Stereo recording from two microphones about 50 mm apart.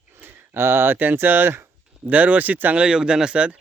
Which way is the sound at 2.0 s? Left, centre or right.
Right.